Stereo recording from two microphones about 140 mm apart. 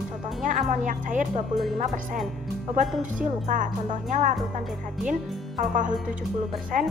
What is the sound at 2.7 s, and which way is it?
Speech, 65° right (ahead or behind).